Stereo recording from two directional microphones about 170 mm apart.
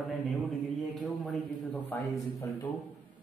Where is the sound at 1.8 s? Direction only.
15° left (ahead or behind).